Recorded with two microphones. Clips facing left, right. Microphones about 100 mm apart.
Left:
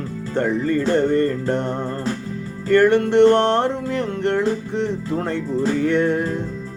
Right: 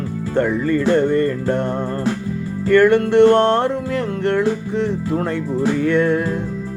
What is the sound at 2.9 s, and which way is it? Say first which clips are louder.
Music: right 2 dB; 20° left (ahead or behind).